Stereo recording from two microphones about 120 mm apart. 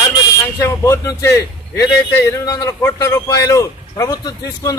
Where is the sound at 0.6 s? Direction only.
25° left (ahead or behind).